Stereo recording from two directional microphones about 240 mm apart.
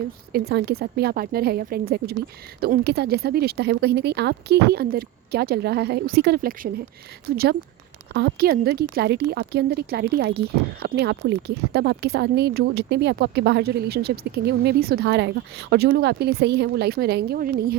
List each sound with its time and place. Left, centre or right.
0.3 s a woman's voice: right